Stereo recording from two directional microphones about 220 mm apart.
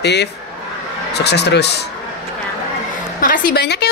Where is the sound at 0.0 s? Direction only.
50° left (ahead or behind).